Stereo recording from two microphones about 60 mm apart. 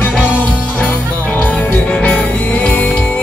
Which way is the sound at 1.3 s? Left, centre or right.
Left.